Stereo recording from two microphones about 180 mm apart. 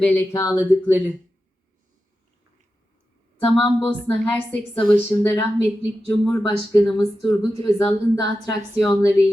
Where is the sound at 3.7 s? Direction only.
10° left (ahead or behind).